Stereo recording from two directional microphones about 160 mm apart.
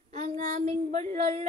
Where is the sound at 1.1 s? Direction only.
50° right (ahead or behind).